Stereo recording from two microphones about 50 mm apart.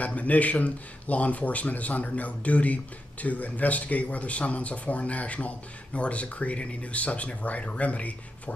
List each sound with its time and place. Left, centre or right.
0.0 s speech: left